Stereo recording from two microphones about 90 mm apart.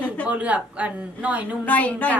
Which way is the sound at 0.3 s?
15° right (ahead or behind).